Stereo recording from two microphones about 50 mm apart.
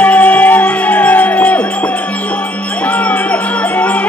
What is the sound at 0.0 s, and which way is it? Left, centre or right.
Music, left.